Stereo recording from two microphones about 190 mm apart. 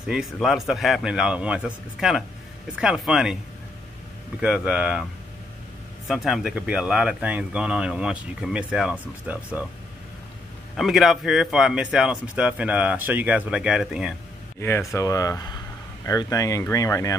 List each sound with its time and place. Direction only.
0.0 s speech: centre (ahead or behind)
4.4 s speech: 5° right (ahead or behind)
6.0 s speech: centre (ahead or behind)
10.8 s speech: centre (ahead or behind)
14.6 s speech: 15° left (ahead or behind)